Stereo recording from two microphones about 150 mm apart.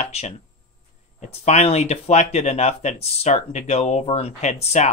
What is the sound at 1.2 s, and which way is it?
Speech, 50° left (ahead or behind).